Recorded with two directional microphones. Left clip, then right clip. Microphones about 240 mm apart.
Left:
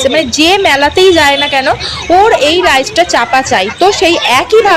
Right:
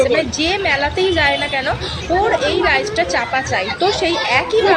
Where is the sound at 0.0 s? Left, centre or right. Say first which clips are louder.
Left 6 dB; left.